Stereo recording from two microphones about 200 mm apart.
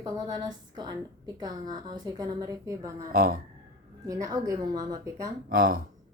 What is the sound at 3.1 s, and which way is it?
Speech, 45° right (ahead or behind).